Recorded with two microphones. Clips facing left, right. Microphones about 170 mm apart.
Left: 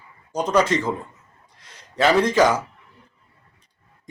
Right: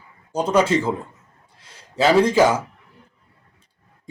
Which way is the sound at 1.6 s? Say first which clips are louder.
Right 1 dB; 30° right (ahead or behind).